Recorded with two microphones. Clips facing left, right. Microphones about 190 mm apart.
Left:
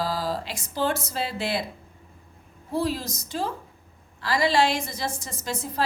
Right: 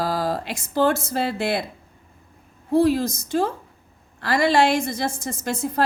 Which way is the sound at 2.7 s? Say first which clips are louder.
Right 9 dB; 55° right (ahead or behind).